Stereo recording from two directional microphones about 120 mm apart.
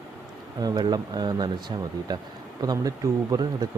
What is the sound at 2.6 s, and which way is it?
Speech, 30° right (ahead or behind).